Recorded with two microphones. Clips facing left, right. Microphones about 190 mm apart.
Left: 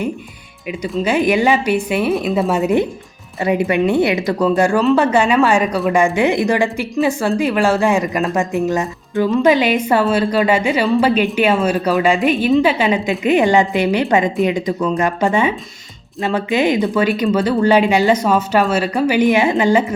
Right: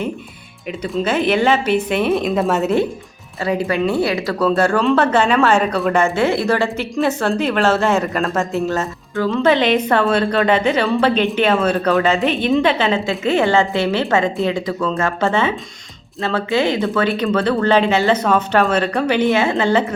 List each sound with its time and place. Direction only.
0.7 s speech: 10° left (ahead or behind)